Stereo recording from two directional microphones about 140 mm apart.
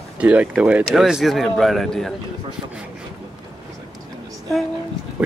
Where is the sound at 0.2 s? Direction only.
10° right (ahead or behind).